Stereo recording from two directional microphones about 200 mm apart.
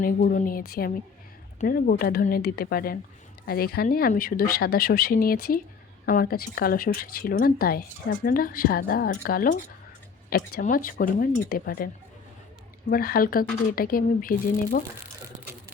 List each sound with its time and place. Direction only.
0.0 s speech: 45° left (ahead or behind)
12.9 s speech: 45° left (ahead or behind)